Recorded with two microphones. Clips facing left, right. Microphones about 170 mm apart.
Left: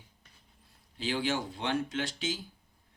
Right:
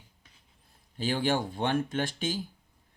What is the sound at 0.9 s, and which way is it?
Speech, 50° right (ahead or behind).